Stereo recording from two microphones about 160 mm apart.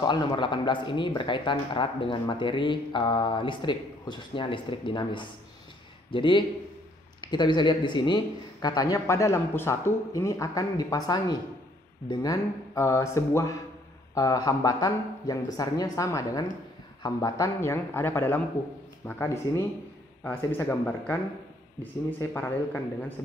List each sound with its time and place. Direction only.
0.0 s speech: 25° left (ahead or behind); by 21.2 s 10° left (ahead or behind)
22.2 s speech: 15° left (ahead or behind)